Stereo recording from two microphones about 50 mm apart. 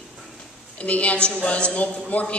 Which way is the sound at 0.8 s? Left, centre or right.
Left.